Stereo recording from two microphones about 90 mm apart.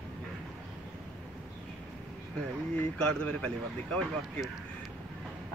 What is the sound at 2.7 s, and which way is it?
Speech, 15° left (ahead or behind).